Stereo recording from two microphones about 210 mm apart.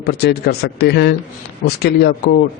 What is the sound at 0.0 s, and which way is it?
A man's voice, 50° left (ahead or behind).